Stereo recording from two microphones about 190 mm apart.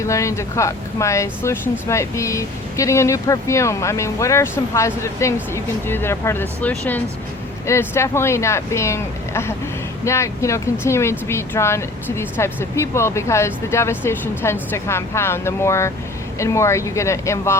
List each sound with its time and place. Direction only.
0.0 s speech: 15° left (ahead or behind)